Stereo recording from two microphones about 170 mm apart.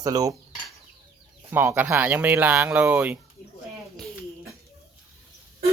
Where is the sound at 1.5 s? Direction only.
15° right (ahead or behind).